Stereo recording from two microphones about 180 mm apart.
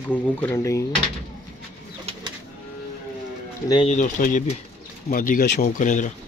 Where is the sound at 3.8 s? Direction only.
45° left (ahead or behind).